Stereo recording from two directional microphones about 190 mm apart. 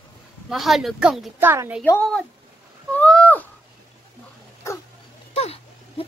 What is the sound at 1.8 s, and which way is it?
A child's voice, 10° left (ahead or behind).